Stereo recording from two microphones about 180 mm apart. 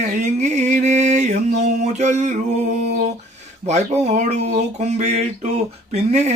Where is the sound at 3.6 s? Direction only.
35° right (ahead or behind).